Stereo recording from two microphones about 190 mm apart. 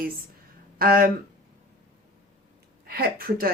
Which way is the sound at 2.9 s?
50° right (ahead or behind).